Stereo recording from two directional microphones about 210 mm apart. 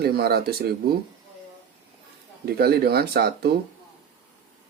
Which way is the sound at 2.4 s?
50° right (ahead or behind).